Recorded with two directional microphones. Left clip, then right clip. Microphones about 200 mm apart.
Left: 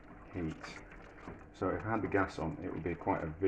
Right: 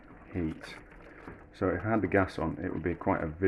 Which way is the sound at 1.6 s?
60° right (ahead or behind).